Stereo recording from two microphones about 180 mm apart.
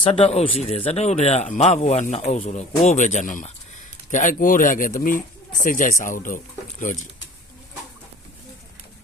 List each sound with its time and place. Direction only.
0.0 s speech: 35° left (ahead or behind)